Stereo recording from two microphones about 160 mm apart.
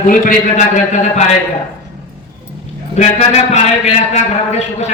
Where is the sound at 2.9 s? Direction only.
45° left (ahead or behind).